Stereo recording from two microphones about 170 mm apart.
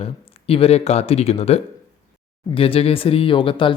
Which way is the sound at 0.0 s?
35° left (ahead or behind).